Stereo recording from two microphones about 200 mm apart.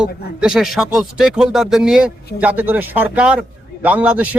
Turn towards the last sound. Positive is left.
turn(degrees=-5)  # may be behind; listen again after turning